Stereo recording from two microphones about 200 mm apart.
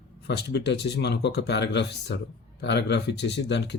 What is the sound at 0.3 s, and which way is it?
Speech, 60° left (ahead or behind).